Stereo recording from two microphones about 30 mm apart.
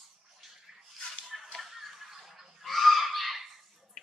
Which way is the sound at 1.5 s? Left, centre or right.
Centre.